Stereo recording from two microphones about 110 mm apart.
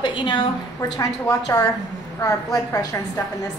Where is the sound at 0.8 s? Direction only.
30° left (ahead or behind).